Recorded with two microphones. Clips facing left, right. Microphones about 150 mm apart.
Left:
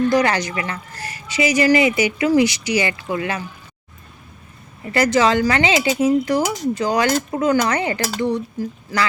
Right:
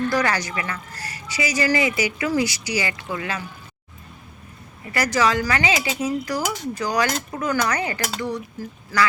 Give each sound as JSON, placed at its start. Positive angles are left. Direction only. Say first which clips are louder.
{"t": 0.1, "sound": "speech", "louder": "left 5 dB", "side_deg": 20}
{"t": 4.9, "sound": "speech", "louder": "left 5 dB", "side_deg": 25}